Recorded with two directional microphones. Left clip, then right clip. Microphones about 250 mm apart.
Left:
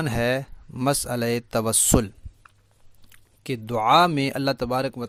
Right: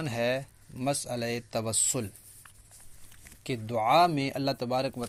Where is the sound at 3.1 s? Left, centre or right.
Left.